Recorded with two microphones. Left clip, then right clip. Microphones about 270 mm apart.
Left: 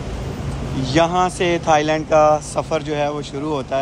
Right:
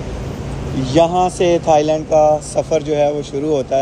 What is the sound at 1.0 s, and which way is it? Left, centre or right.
Speech, left.